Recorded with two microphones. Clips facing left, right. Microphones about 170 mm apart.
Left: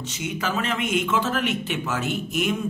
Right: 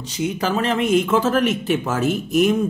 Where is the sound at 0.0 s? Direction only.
35° right (ahead or behind).